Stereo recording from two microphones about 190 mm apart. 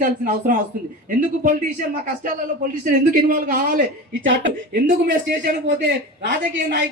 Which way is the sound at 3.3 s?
45° right (ahead or behind).